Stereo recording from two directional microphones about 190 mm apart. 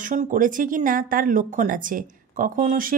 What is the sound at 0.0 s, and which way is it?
Speech, 45° right (ahead or behind).